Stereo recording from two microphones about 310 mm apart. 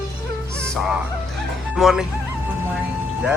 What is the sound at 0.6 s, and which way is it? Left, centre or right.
Fowl, centre.